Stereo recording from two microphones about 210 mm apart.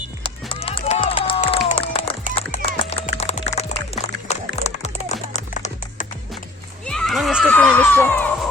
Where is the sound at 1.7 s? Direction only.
25° left (ahead or behind).